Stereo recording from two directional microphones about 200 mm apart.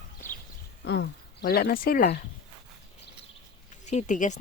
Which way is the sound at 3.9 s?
35° left (ahead or behind).